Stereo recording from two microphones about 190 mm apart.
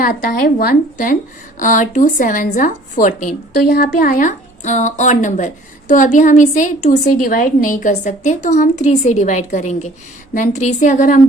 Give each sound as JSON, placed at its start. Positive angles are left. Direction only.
{"t": 0.0, "sound": "a woman's voice", "side_deg": 50}